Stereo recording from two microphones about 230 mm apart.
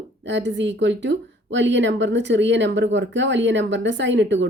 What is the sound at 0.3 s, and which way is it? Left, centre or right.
Speech, right.